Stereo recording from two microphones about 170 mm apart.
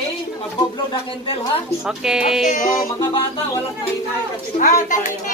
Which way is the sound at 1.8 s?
5° right (ahead or behind).